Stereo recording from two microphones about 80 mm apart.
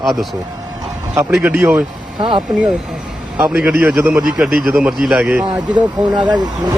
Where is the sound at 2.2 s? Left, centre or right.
Right.